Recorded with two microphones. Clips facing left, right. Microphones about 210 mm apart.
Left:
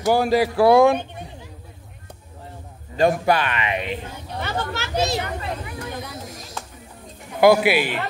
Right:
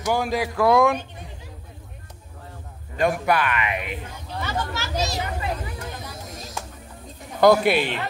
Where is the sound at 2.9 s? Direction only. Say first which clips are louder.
Left 3 dB; 30° left (ahead or behind).